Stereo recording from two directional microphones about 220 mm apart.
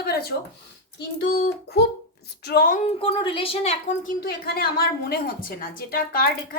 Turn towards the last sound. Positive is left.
turn(degrees=40)  # may be behind; listen again after turning